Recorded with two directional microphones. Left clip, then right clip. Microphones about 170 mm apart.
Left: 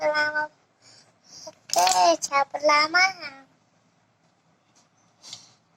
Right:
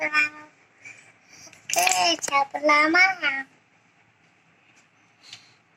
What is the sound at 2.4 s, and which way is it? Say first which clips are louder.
A child's voice: right 4 dB; 20° right (ahead or behind).